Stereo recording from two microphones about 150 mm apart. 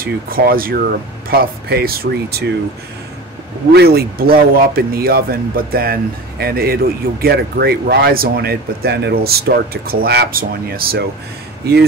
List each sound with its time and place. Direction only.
0.0 s speech: 80° right
1.3 s speech: 90° right
3.7 s speech: 90° right